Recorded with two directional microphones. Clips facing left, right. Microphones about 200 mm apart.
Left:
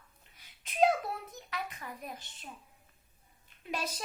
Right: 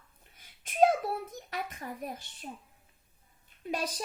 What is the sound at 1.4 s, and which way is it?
Speech, 45° right (ahead or behind).